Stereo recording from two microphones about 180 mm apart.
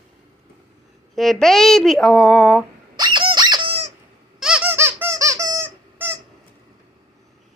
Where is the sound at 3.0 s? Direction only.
25° right (ahead or behind).